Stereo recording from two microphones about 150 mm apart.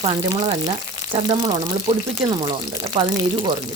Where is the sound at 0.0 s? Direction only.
35° right (ahead or behind).